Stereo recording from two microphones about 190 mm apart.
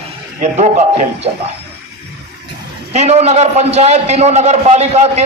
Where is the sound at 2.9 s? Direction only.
35° right (ahead or behind).